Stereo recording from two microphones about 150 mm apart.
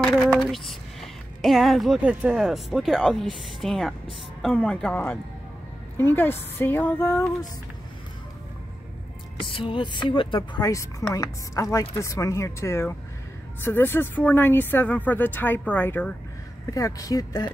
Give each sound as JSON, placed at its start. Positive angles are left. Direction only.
{"t": 0.0, "sound": "speech", "side_deg": 5}
{"t": 9.5, "sound": "speech", "side_deg": 35}
{"t": 16.7, "sound": "speech", "side_deg": 25}